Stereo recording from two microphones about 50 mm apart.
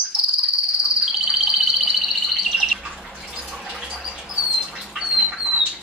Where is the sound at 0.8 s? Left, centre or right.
Centre.